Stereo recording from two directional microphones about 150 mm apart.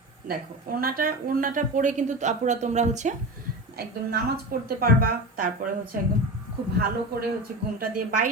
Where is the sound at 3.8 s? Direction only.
90° right.